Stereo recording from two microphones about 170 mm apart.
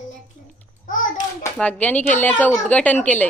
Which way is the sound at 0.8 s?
50° left (ahead or behind).